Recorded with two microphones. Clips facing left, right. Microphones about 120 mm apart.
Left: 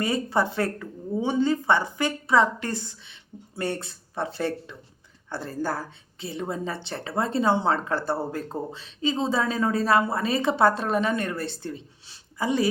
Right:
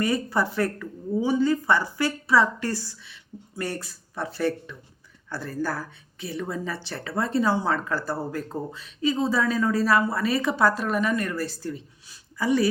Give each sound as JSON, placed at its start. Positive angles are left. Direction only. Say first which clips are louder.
{"t": 0.0, "sound": "speech", "louder": "even", "side_deg": 25}